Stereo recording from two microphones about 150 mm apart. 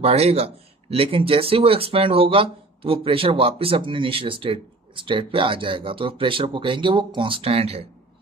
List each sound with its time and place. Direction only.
0.0 s speech: 45° right (ahead or behind)